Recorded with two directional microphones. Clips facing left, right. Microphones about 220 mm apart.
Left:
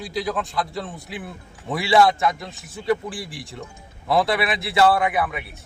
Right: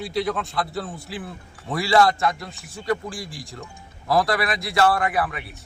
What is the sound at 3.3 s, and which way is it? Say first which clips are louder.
Speech: left 1 dB; 65° left (ahead or behind).